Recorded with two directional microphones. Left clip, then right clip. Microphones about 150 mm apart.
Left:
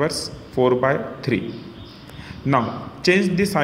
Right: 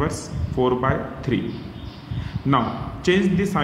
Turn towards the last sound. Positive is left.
turn(degrees=25)  # may be behind; listen again after turning